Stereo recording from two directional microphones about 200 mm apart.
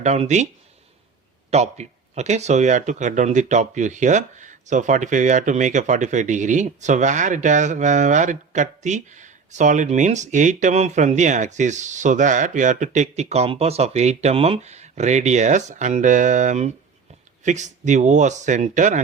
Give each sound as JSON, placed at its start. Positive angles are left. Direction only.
{"t": 0.0, "sound": "speech", "side_deg": -35}
{"t": 1.5, "sound": "speech", "side_deg": -35}